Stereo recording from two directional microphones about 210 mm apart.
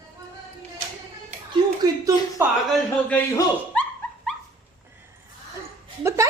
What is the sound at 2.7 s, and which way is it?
Speech, 5° left (ahead or behind).